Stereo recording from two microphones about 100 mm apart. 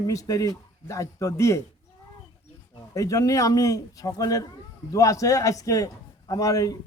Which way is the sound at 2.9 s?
35° left (ahead or behind).